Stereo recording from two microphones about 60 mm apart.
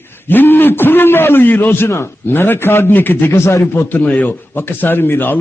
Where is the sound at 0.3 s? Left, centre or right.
Left.